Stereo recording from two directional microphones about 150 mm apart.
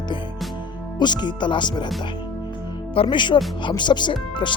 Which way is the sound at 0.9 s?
30° left (ahead or behind).